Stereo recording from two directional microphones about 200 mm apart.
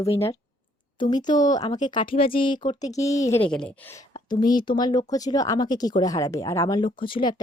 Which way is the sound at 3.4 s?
5° left (ahead or behind).